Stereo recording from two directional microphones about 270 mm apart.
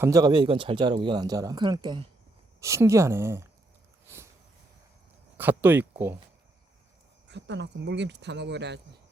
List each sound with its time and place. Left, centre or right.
0.0 s speech: centre
5.4 s speech: centre
7.3 s speech: right